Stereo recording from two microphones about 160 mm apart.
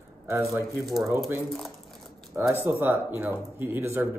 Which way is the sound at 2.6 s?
10° right (ahead or behind).